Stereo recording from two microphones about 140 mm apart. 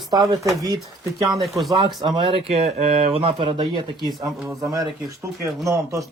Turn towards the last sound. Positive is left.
turn(degrees=-20)  # may be behind; listen again after turning